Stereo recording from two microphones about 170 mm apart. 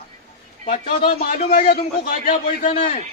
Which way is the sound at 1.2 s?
50° left (ahead or behind).